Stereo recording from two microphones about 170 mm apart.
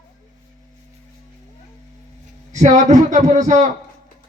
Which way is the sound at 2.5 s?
45° right (ahead or behind).